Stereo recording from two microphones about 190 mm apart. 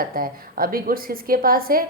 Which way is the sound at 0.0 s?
50° right (ahead or behind).